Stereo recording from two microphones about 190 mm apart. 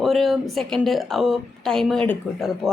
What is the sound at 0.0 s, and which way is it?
A woman's voice, centre (ahead or behind).